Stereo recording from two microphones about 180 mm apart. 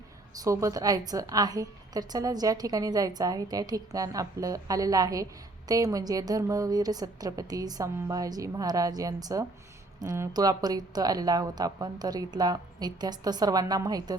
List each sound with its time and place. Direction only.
0.3 s a woman's voice: 20° right (ahead or behind)